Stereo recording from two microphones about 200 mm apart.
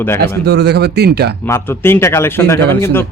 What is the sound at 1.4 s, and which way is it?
Speech, 15° left (ahead or behind).